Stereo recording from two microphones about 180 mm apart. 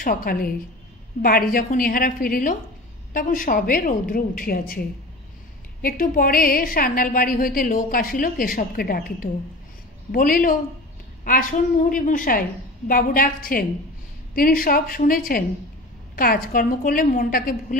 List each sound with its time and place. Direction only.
0.0 s a woman's voice: 55° left (ahead or behind)